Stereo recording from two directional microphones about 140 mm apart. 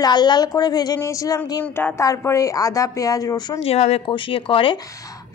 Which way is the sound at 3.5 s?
50° left (ahead or behind).